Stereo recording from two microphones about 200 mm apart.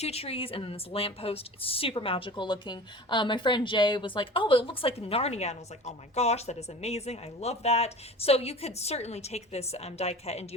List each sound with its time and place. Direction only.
0.0 s a woman's voice: 30° left (ahead or behind)